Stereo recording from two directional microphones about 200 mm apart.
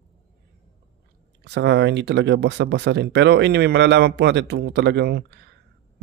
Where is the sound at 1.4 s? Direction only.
60° right (ahead or behind).